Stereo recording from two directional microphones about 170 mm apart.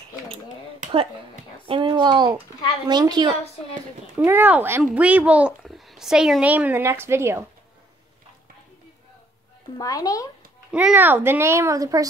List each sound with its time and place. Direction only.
1.7 s speech: 25° right (ahead or behind)
4.2 s a child's voice: 10° right (ahead or behind)
9.8 s speech: 20° left (ahead or behind)
10.7 s a child's voice: 5° right (ahead or behind)